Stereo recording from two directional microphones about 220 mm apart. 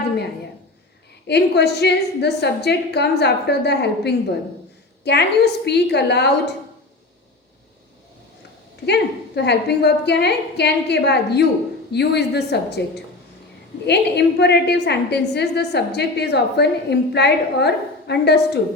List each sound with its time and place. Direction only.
1.3 s a woman's voice: 50° left (ahead or behind)
8.9 s a woman's voice: 50° left (ahead or behind)